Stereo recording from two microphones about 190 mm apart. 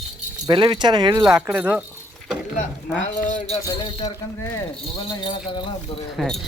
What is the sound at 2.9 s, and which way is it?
Speech, 5° right (ahead or behind).